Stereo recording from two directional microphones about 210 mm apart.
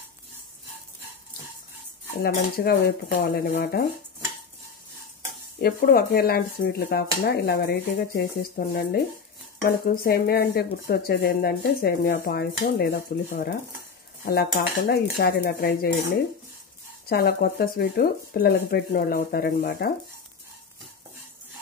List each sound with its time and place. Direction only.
2.2 s speech: 45° left (ahead or behind)
5.6 s speech: 45° left (ahead or behind)
17.1 s speech: 45° left (ahead or behind)